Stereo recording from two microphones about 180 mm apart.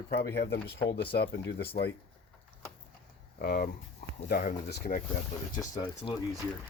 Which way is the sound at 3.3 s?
55° left (ahead or behind).